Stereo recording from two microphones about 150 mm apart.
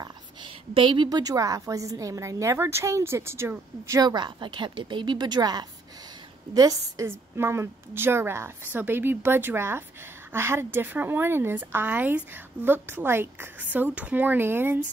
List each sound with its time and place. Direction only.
0.0 s a woman's voice: 30° right (ahead or behind); by 14.8 s 15° right (ahead or behind)